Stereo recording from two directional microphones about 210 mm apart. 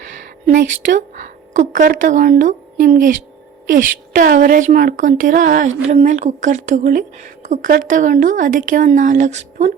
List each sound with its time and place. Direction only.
0.4 s a woman's voice: 40° right (ahead or behind)